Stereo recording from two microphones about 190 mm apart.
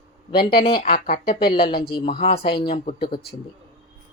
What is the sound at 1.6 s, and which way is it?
Speech, 25° left (ahead or behind).